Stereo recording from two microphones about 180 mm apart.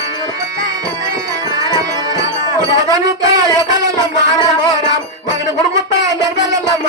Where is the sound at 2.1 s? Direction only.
20° right (ahead or behind).